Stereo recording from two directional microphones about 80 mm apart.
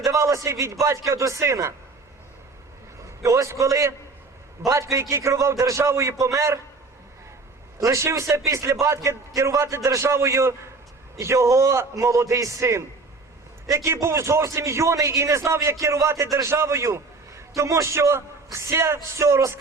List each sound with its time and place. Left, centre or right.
0.0 s a man's voice: right
3.2 s a man's voice: right
7.8 s a man's voice: right